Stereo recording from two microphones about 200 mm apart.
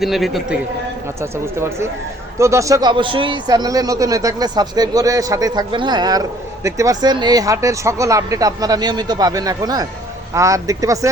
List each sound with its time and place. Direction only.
0.0 s a man's voice: centre (ahead or behind)
1.2 s speech: 15° right (ahead or behind)